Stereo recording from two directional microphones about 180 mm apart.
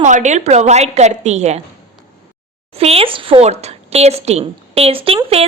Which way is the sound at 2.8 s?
35° right (ahead or behind).